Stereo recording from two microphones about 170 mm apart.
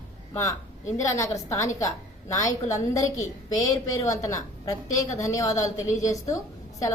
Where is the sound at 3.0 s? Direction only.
45° left (ahead or behind).